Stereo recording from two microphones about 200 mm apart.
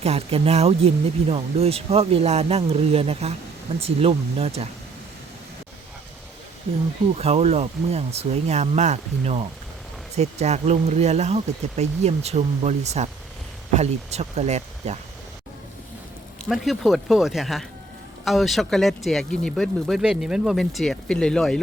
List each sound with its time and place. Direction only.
0.0 s speech: 30° right (ahead or behind)
7.2 s speech: 30° right (ahead or behind)
16.5 s speech: centre (ahead or behind)